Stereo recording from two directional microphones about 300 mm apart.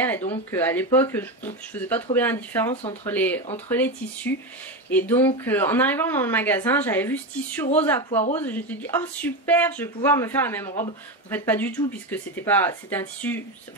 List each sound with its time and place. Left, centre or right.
0.3 s speech: centre
2.7 s speech: centre
3.1 s speech: centre